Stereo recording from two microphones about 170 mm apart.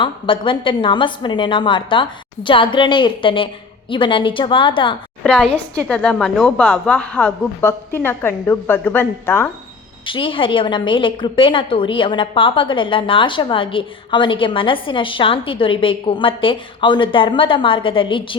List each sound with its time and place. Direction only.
0.0 s a woman's voice: 30° left (ahead or behind)
5.2 s a woman's voice: 5° left (ahead or behind)
10.1 s a woman's voice: 30° left (ahead or behind)